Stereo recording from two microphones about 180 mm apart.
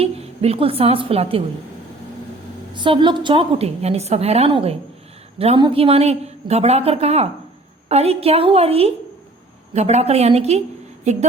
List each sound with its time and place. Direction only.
0.0 s a woman's voice: 35° right (ahead or behind)
2.7 s a woman's voice: 25° right (ahead or behind)